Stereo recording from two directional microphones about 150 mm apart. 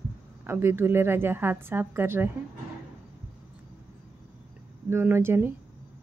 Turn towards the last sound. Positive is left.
turn(degrees=-15)  # may be behind; listen again after turning